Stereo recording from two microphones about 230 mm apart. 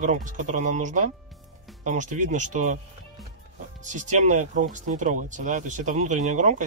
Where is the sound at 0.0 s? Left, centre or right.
Right.